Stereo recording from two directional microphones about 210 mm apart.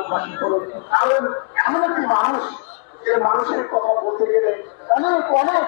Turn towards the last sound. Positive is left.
turn(degrees=20)  # may be behind; listen again after turning